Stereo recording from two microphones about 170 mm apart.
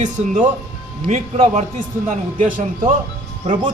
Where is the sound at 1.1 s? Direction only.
45° right (ahead or behind).